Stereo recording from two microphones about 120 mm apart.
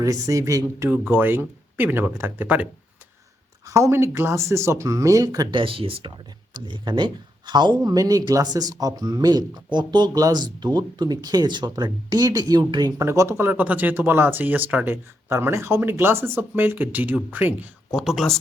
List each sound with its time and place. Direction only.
0.0 s speech: 25° right (ahead or behind)
3.7 s speech: 25° right (ahead or behind)
5.5 s speech: 50° right (ahead or behind)
13.1 s speech: 20° right (ahead or behind)
17.9 s speech: 5° right (ahead or behind)